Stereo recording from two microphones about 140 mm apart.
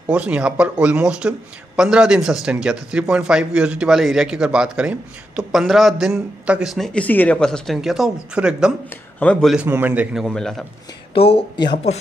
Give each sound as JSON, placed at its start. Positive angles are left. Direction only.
{"t": 0.1, "sound": "a man's voice", "side_deg": -10}
{"t": 9.2, "sound": "a man's voice", "side_deg": 10}
{"t": 9.7, "sound": "speech", "side_deg": -10}
{"t": 10.2, "sound": "a man's voice", "side_deg": 5}
{"t": 11.1, "sound": "speech", "side_deg": 40}